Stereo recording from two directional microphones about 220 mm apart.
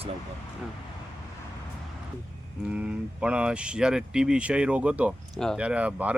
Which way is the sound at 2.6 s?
5° right (ahead or behind).